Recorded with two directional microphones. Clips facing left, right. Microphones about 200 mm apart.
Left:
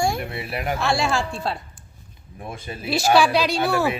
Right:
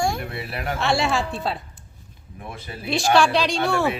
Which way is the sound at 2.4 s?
25° left (ahead or behind).